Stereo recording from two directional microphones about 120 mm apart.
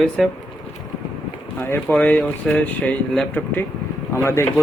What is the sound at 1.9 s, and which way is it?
A man's voice, 10° left (ahead or behind).